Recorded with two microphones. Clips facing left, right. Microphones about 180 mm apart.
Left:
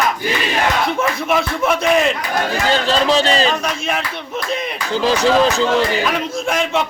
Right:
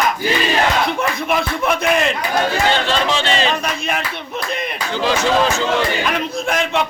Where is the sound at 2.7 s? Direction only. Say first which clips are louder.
Left 2 dB; 40° left (ahead or behind).